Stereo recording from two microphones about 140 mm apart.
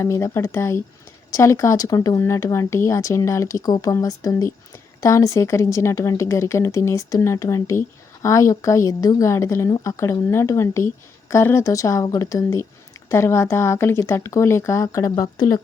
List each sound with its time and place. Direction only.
0.0 s speech: 20° left (ahead or behind)